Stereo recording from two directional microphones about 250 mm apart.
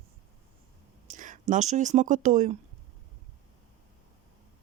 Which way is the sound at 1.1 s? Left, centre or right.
Right.